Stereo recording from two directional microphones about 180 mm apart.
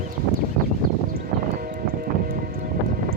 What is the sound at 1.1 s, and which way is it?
Music, 55° right (ahead or behind).